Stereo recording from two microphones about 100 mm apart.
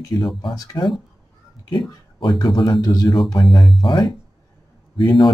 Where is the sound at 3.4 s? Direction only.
Centre (ahead or behind).